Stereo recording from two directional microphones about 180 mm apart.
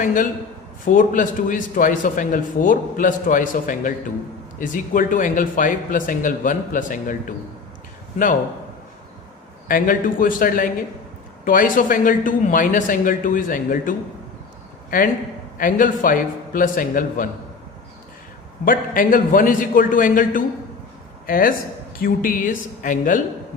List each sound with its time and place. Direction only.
0.0 s a man's voice: 45° left (ahead or behind)
9.6 s a man's voice: 50° left (ahead or behind)
18.6 s a man's voice: 50° left (ahead or behind)